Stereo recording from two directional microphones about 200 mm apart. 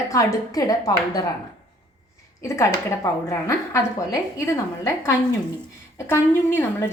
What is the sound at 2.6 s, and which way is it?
A woman's voice, 15° left (ahead or behind).